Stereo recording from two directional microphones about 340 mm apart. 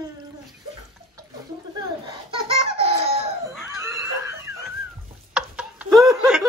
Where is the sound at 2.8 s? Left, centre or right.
Centre.